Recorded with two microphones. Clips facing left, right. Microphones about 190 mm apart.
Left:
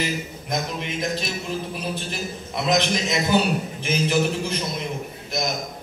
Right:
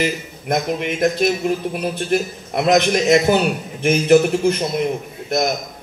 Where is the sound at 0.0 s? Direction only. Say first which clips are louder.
Right 5 dB; 60° right (ahead or behind).